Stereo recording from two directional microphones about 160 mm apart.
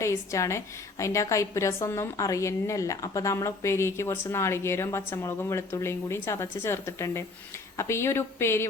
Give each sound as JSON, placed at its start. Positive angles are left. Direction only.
{"t": 0.0, "sound": "a woman's voice", "side_deg": 20}